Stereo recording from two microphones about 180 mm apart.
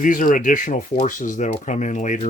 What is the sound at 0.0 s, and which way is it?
Speech, 45° left (ahead or behind).